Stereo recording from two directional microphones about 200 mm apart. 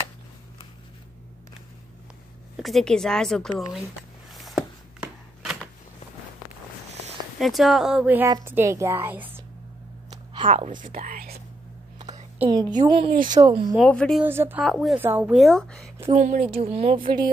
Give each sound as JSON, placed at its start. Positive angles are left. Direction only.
{"t": 2.6, "sound": "a woman's voice", "side_deg": 0}
{"t": 4.3, "sound": "a sound", "side_deg": 0}
{"t": 7.3, "sound": "speech", "side_deg": 0}
{"t": 10.3, "sound": "speech", "side_deg": -30}
{"t": 12.7, "sound": "speech", "side_deg": -25}
{"t": 13.7, "sound": "a woman's voice", "side_deg": 5}
{"t": 14.2, "sound": "speech", "side_deg": -10}
{"t": 14.6, "sound": "a woman's voice", "side_deg": 0}
{"t": 15.0, "sound": "a woman's voice", "side_deg": -10}
{"t": 16.1, "sound": "speech", "side_deg": -40}
{"t": 16.4, "sound": "speech", "side_deg": -30}